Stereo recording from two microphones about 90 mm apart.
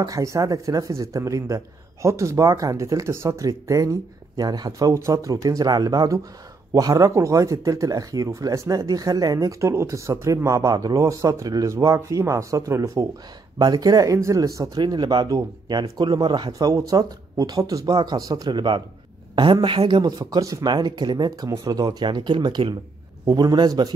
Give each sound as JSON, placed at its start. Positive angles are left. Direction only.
{"t": 0.0, "sound": "speech", "side_deg": -40}
{"t": 13.6, "sound": "speech", "side_deg": -45}
{"t": 14.8, "sound": "speech", "side_deg": -50}